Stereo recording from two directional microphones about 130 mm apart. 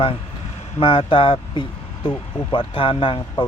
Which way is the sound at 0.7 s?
40° left (ahead or behind).